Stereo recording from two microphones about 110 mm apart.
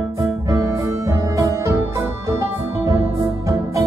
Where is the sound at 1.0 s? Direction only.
25° right (ahead or behind).